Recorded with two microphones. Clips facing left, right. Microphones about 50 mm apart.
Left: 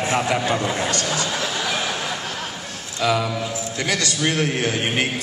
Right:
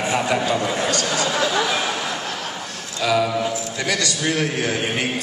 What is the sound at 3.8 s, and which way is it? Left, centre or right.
A man's voice, left.